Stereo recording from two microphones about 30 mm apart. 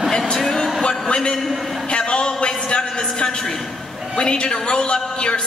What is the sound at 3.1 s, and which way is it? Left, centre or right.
A man's voice, left.